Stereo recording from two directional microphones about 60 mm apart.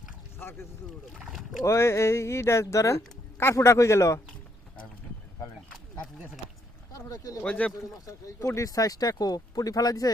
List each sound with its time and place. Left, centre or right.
1.2 s speech: centre
1.6 s speech: left
6.9 s speech: left
7.4 s speech: left
7.9 s speech: left
8.4 s speech: left